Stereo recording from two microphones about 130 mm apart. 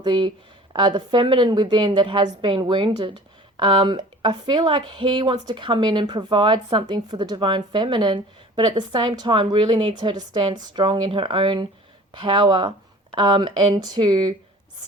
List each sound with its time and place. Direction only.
0.0 s speech: 40° right (ahead or behind)